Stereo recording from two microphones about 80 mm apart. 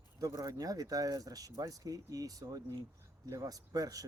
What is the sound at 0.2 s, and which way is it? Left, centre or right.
Speech, right.